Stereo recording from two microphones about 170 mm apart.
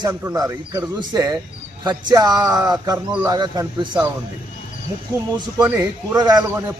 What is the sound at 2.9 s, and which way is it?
Speech, 10° right (ahead or behind).